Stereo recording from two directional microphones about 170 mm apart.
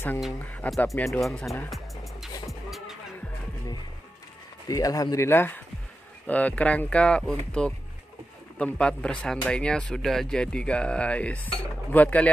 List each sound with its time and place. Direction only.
0.5 s speech: 10° left (ahead or behind)
4.6 s speech: 20° left (ahead or behind)